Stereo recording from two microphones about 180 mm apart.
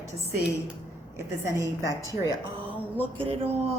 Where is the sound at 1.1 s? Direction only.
20° right (ahead or behind).